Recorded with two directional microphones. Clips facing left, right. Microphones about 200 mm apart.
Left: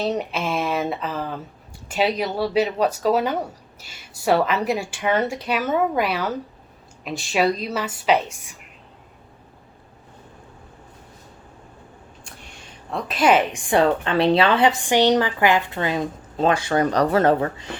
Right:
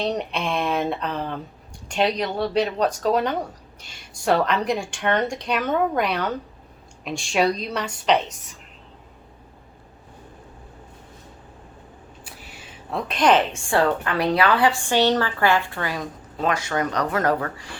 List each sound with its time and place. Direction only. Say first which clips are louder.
0.0 s a woman's voice: left 1 dB; 5° left (ahead or behind)
12.2 s a woman's voice: right 1 dB; 5° right (ahead or behind); by 17.7 s 20° left (ahead or behind)